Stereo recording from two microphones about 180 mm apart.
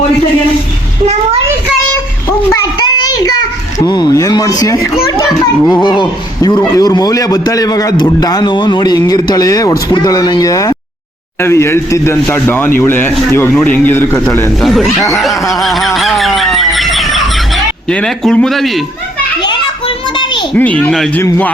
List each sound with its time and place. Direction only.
3.0 s a sound: 25° left (ahead or behind)
3.8 s a man's voice: 20° left (ahead or behind)
14.6 s a man's voice: centre (ahead or behind)
15.5 s a sound: centre (ahead or behind)
17.8 s a man's voice: 5° left (ahead or behind)
20.6 s a man's voice: 10° left (ahead or behind)